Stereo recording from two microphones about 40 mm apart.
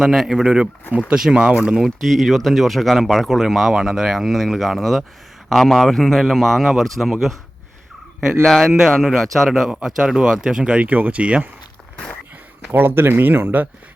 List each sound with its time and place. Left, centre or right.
0.0 s speech: centre
1.4 s speech: right
1.8 s speech: centre
8.4 s speech: centre
10.8 s speech: right
11.2 s speech: right
12.7 s speech: right